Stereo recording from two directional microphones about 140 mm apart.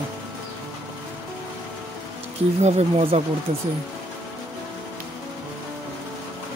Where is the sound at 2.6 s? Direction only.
45° right (ahead or behind).